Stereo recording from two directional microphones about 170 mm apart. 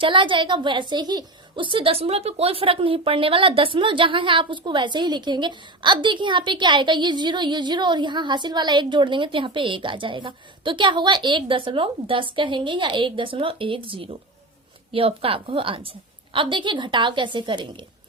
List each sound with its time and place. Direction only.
0.0 s a woman's voice: 30° right (ahead or behind)